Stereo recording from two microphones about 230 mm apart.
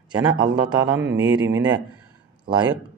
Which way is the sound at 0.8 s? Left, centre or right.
Right.